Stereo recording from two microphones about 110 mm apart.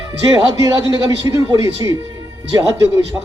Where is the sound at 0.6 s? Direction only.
30° right (ahead or behind).